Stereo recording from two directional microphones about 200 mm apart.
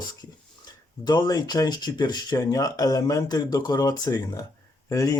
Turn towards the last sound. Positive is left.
turn(degrees=15)  # may be behind; listen again after turning